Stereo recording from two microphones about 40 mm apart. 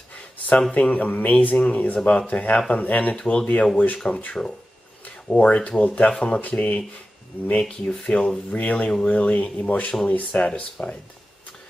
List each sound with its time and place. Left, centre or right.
0.6 s speech: left
0.9 s speech: left
3.2 s speech: left
8.5 s speech: left
10.5 s speech: centre